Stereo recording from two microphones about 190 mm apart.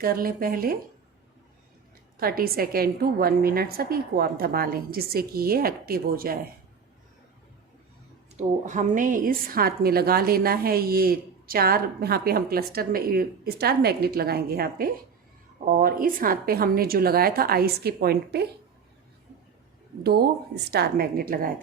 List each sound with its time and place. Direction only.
0.0 s a woman's voice: 50° right (ahead or behind)
2.1 s a woman's voice: 50° right (ahead or behind)
8.4 s a woman's voice: 40° right (ahead or behind); by 18.4 s 55° right (ahead or behind)
20.0 s a woman's voice: 55° right (ahead or behind)